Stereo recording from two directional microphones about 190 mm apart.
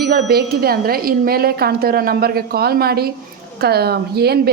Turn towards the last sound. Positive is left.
turn(degrees=-55)  # may be behind; listen again after turning